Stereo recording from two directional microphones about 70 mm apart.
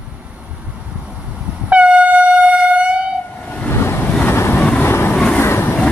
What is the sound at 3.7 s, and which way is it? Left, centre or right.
Waves, left.